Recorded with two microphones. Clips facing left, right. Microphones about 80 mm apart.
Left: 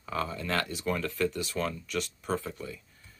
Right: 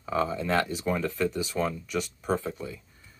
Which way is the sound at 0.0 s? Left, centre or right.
Centre.